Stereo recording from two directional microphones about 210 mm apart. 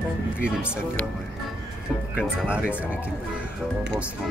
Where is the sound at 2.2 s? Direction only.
5° right (ahead or behind).